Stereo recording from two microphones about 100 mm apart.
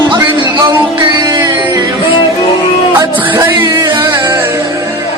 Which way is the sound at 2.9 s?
20° right (ahead or behind).